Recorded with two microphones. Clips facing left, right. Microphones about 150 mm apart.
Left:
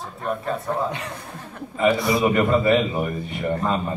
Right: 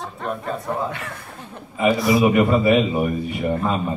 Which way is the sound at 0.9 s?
20° left (ahead or behind).